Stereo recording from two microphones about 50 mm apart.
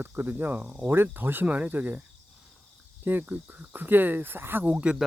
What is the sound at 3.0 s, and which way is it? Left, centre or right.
Cricket, right.